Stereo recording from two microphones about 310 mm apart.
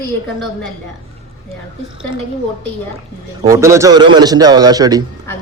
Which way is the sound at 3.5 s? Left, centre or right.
Centre.